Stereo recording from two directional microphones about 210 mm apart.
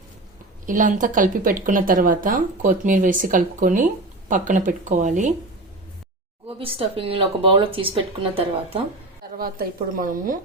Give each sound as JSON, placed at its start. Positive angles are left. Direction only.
{"t": 0.6, "sound": "a woman's voice", "side_deg": -40}
{"t": 6.6, "sound": "speech", "side_deg": -25}
{"t": 9.4, "sound": "a woman's voice", "side_deg": -40}